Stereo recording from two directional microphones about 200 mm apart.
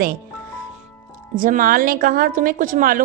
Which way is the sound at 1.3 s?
45° right (ahead or behind).